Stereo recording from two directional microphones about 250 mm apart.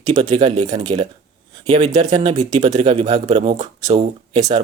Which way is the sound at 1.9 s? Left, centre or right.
Centre.